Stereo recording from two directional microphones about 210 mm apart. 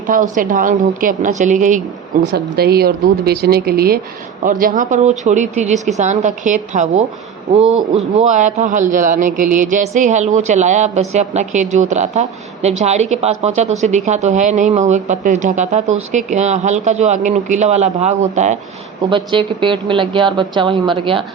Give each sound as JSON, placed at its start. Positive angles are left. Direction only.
{"t": 0.1, "sound": "speech", "side_deg": -40}
{"t": 2.3, "sound": "speech", "side_deg": -50}
{"t": 19.1, "sound": "speech", "side_deg": -25}